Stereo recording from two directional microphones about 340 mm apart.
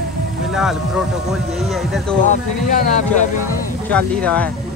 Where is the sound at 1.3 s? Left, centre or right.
Centre.